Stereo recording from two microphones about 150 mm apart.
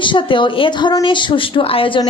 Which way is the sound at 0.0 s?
35° left (ahead or behind).